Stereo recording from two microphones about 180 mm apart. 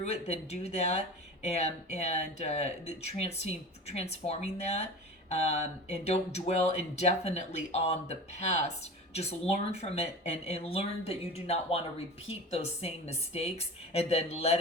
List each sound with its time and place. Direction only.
0.0 s speech: 35° left (ahead or behind)